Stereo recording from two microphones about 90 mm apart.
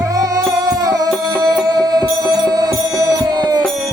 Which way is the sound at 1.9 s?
50° right (ahead or behind).